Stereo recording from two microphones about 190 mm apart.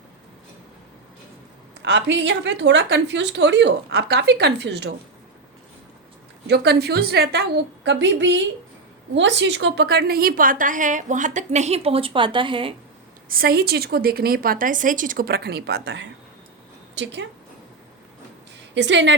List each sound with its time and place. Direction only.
1.8 s speech: 70° right (ahead or behind)
6.5 s a woman's voice: 60° right (ahead or behind); by 12.7 s 25° right (ahead or behind)
13.2 s a woman's voice: 50° right (ahead or behind); by 17.2 s 70° right (ahead or behind)
18.7 s speech: 70° right (ahead or behind)